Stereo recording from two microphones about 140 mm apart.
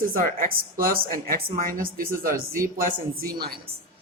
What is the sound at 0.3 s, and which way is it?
Speech, 90° right.